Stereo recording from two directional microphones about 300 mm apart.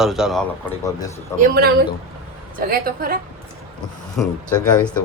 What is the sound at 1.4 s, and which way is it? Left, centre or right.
A woman's voice, right.